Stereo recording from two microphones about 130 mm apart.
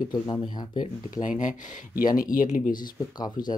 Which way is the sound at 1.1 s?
85° left.